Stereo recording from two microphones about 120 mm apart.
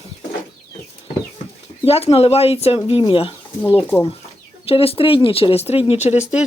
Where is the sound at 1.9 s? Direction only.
55° left (ahead or behind).